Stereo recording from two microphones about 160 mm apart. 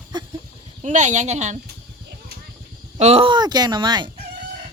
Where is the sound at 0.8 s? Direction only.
50° right (ahead or behind).